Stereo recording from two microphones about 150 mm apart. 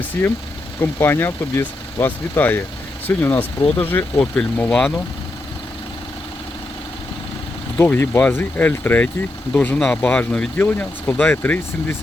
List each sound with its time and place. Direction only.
0.2 s speech: 15° left (ahead or behind)
7.8 s speech: 15° left (ahead or behind)